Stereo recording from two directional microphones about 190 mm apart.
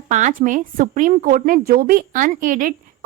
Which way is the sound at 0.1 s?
40° right (ahead or behind).